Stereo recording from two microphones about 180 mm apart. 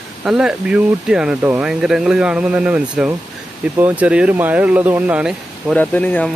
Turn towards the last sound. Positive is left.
turn(degrees=10)  # may be behind; listen again after turning